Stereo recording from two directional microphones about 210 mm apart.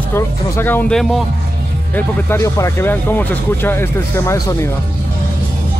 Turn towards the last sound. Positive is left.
turn(degrees=10)  # may be behind; listen again after turning